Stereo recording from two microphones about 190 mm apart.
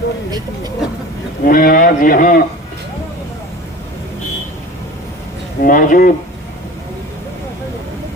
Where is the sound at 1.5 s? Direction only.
50° left (ahead or behind).